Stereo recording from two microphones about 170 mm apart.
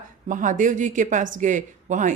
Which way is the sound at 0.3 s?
50° right (ahead or behind).